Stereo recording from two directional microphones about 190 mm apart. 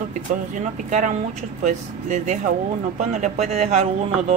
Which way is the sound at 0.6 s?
40° right (ahead or behind).